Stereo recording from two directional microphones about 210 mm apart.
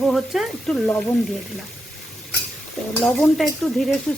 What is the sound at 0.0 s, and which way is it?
Speech, centre (ahead or behind).